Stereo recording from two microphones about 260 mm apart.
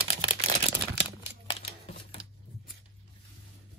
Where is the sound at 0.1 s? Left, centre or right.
Right.